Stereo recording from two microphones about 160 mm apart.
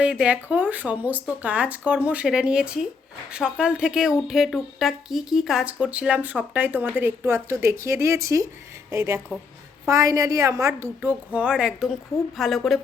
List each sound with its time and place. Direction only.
0.0 s a woman's voice: 5° right (ahead or behind)